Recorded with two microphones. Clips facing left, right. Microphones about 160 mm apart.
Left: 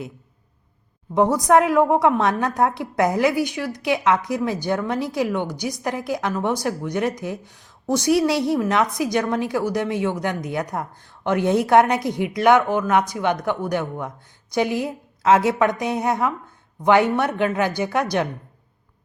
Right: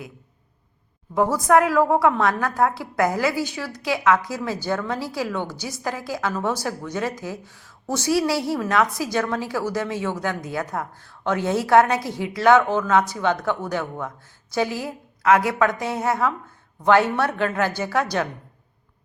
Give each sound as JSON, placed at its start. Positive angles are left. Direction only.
{"t": 1.1, "sound": "a woman's voice", "side_deg": 20}